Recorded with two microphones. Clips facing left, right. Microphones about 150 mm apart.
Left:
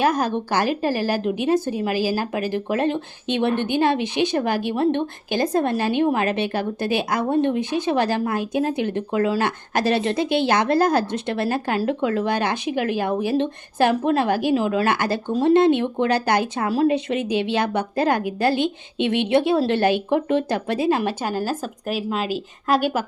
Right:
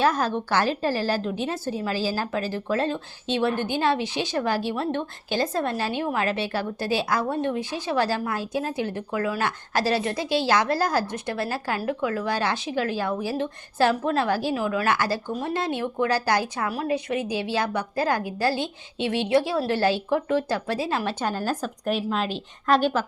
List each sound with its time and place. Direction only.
0.0 s a woman's voice: 15° left (ahead or behind)